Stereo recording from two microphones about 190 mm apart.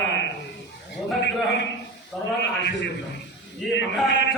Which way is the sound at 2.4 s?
70° left (ahead or behind).